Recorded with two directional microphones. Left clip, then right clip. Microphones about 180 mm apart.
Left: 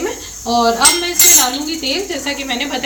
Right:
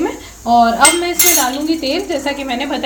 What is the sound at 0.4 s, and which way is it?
Cutlery, 55° right (ahead or behind).